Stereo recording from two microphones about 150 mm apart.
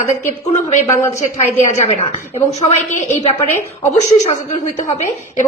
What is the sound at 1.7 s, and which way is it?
A woman's voice, 45° left (ahead or behind).